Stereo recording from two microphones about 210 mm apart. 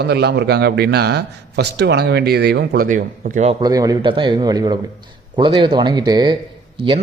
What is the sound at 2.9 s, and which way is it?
Speech, 40° right (ahead or behind).